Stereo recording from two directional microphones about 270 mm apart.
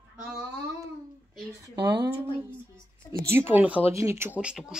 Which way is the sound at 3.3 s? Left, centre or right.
Centre.